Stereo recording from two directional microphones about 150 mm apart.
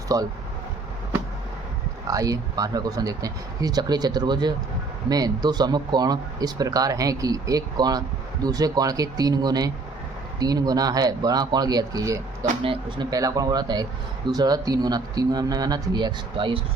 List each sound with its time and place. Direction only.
0.1 s speech: 25° right (ahead or behind)
2.0 s speech: 25° right (ahead or behind)
12.6 s speech: 35° right (ahead or behind)
13.1 s speech: 25° right (ahead or behind)